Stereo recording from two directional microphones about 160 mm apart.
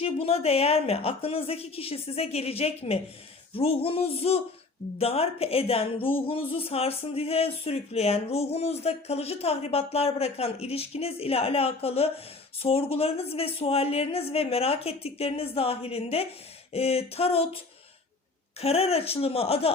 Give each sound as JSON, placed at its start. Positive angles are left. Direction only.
{"t": 0.0, "sound": "speech", "side_deg": 40}
{"t": 18.6, "sound": "speech", "side_deg": 40}